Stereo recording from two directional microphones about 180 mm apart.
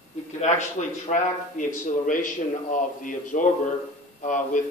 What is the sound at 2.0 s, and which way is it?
A man's voice, 45° left (ahead or behind).